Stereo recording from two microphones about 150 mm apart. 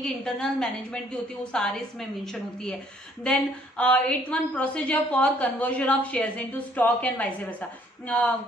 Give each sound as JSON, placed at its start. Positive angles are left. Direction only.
{"t": 0.0, "sound": "a woman's voice", "side_deg": 5}